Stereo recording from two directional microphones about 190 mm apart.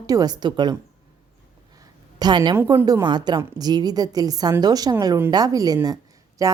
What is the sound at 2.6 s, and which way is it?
A woman's voice, 15° right (ahead or behind).